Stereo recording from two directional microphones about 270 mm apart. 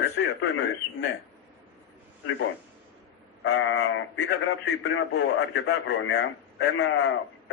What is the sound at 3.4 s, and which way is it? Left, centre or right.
A man's voice, left.